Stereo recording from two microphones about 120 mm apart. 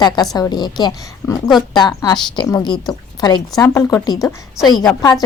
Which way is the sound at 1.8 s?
35° left (ahead or behind).